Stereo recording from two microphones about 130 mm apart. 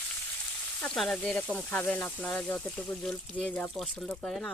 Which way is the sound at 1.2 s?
10° left (ahead or behind).